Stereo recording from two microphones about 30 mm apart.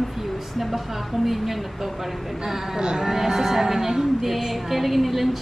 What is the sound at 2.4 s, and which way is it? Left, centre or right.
Music, centre.